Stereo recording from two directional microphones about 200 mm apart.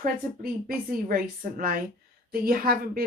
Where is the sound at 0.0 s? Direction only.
45° right (ahead or behind).